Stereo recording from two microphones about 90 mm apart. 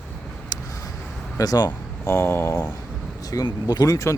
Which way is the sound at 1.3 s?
45° left (ahead or behind).